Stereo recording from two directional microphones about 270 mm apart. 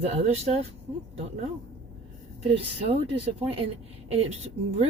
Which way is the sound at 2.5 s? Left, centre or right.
Right.